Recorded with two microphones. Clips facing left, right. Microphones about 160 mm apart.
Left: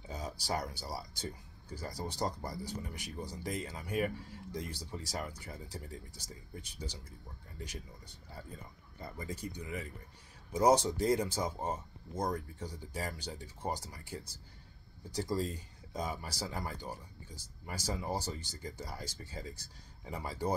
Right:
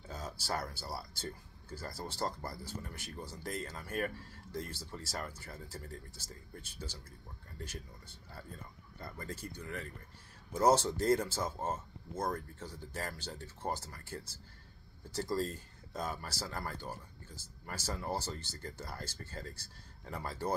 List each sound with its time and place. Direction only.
0.1 s speech: 15° left (ahead or behind)
9.0 s speech: 15° left (ahead or behind)